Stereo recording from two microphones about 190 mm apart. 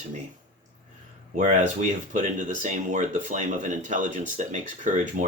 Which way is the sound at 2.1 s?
40° right (ahead or behind).